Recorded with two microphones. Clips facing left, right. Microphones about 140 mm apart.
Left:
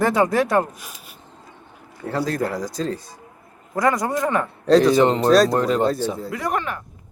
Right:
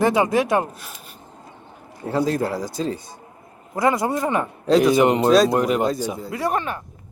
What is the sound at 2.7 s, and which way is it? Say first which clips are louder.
Speech: even; 5° right (ahead or behind).